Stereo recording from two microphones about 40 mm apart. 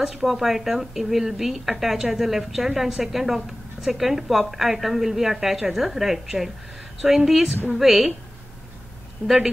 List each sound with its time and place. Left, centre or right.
0.0 s a woman's voice: centre
9.2 s speech: left